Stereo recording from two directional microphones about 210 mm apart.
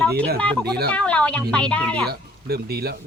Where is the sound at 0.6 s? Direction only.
50° right (ahead or behind).